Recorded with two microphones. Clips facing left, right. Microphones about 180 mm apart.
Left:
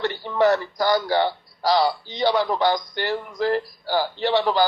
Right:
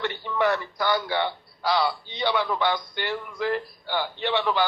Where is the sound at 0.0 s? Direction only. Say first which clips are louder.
Left 5 dB; 35° left (ahead or behind).